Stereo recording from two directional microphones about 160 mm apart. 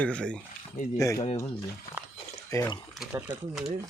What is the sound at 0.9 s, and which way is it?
Speech, 20° left (ahead or behind).